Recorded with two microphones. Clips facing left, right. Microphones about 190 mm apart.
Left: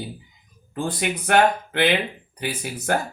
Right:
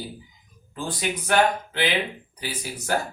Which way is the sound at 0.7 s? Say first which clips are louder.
Left 3 dB; 60° left (ahead or behind).